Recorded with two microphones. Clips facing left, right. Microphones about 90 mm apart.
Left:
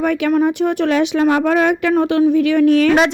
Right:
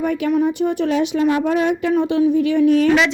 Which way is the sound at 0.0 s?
70° left (ahead or behind).